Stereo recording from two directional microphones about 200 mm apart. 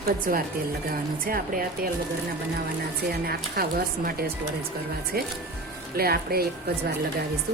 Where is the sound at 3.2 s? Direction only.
50° right (ahead or behind).